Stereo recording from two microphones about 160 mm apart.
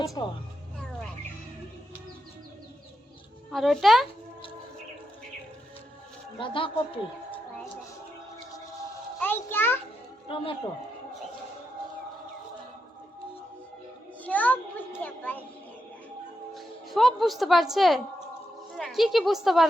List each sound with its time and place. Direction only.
0.0 s speech: 20° left (ahead or behind)
3.5 s a woman's voice: centre (ahead or behind)
6.4 s a woman's voice: 35° left (ahead or behind)
9.2 s a child's voice: 15° left (ahead or behind)
10.2 s a woman's voice: 35° left (ahead or behind)
14.3 s a sound: 10° left (ahead or behind)
16.6 s a woman's voice: centre (ahead or behind)